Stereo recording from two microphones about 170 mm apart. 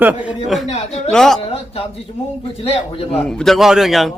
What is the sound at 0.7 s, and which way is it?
Speech, 40° left (ahead or behind).